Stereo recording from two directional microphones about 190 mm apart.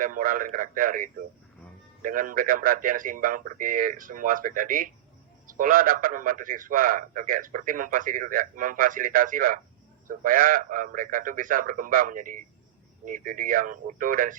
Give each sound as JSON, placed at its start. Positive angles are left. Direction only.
{"t": 0.0, "sound": "a man's voice", "side_deg": -45}